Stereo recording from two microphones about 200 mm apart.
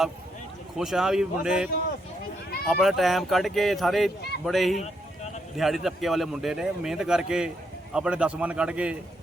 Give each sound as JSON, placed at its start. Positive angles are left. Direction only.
{"t": 0.8, "sound": "a man's voice", "side_deg": 0}